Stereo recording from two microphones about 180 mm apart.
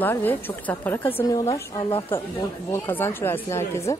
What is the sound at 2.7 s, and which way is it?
Speech, 15° left (ahead or behind).